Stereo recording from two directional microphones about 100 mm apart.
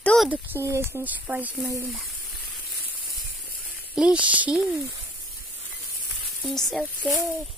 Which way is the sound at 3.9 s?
10° right (ahead or behind).